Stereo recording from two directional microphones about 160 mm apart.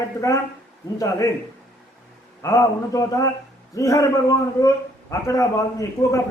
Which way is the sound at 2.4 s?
20° left (ahead or behind).